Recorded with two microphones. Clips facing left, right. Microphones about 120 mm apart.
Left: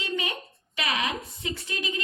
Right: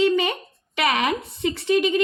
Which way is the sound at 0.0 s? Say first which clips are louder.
Right 12 dB; 70° right (ahead or behind).